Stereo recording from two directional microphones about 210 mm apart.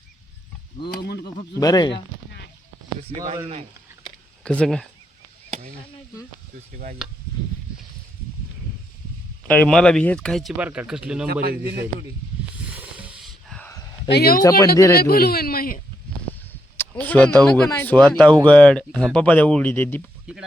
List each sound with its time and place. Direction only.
0.9 s speech: 50° left (ahead or behind)
1.5 s speech: 20° left (ahead or behind)
4.4 s speech: 5° left (ahead or behind)
9.5 s speech: 5° left (ahead or behind)
11.4 s a man's voice: 45° right (ahead or behind)
12.7 s a sound: 5° right (ahead or behind)
14.1 s speech: 45° left (ahead or behind)
16.7 s a sound: 10° left (ahead or behind)
17.7 s speech: 10° left (ahead or behind)